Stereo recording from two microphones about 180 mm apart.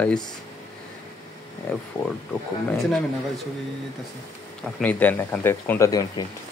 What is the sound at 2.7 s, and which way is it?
Speech, centre (ahead or behind).